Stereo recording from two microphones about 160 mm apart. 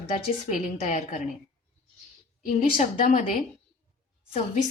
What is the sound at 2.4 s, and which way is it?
A woman's voice, 45° left (ahead or behind).